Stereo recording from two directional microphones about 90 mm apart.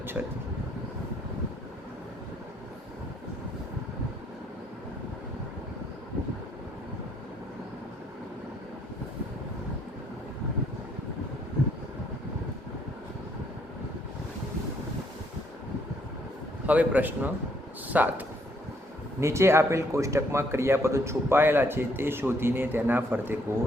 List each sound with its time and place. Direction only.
0.1 s a man's voice: 15° right (ahead or behind)
16.6 s a man's voice: 15° right (ahead or behind)
19.2 s speech: 30° right (ahead or behind)